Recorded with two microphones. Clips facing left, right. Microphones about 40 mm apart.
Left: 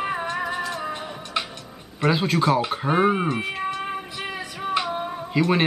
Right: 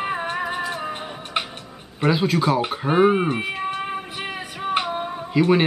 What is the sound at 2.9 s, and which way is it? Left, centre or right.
Speech, centre.